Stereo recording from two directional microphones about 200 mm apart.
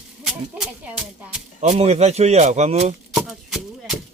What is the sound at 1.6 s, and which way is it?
A man's voice, 30° right (ahead or behind).